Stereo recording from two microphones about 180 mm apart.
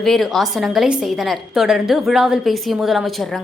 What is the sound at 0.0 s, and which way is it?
A woman's voice, centre (ahead or behind).